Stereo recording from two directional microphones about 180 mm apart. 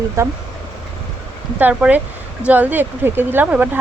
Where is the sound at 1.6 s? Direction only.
10° right (ahead or behind).